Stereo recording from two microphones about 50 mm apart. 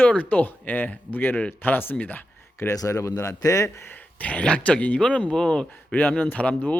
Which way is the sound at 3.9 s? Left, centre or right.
Left.